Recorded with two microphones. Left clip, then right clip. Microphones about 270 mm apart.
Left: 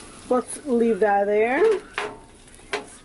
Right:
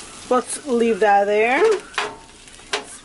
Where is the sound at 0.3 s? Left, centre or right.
Centre.